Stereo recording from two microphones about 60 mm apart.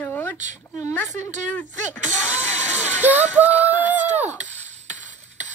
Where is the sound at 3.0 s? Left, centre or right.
Right.